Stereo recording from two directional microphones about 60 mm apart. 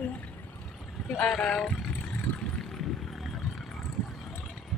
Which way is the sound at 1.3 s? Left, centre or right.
Centre.